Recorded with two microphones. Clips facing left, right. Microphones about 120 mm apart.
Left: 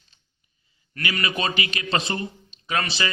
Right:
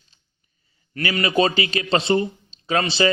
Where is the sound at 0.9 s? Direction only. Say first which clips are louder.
Right 7 dB; 30° right (ahead or behind).